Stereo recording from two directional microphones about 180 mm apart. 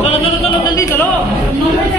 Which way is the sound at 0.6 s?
20° left (ahead or behind).